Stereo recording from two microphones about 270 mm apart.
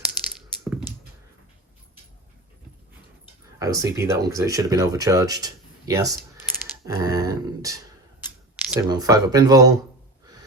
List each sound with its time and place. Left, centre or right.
0.0 s crushing: centre
3.6 s speech: centre